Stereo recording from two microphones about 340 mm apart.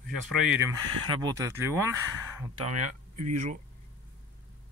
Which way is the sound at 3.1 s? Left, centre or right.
Right.